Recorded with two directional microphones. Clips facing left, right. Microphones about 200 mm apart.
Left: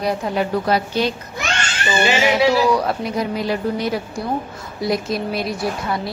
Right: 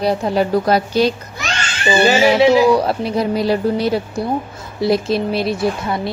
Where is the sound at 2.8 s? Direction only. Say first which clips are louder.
Right 4 dB; 30° right (ahead or behind).